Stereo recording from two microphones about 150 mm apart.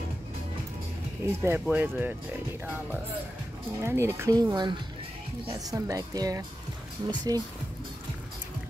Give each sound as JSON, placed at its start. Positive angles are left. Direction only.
{"t": 1.2, "sound": "speech", "side_deg": -15}
{"t": 3.8, "sound": "a woman's voice", "side_deg": -15}